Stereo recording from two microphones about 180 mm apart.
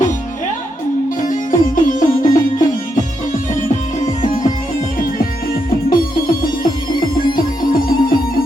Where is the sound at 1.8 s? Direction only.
45° left (ahead or behind).